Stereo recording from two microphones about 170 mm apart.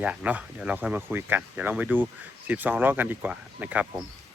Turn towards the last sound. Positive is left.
turn(degrees=-10)  # may be behind; listen again after turning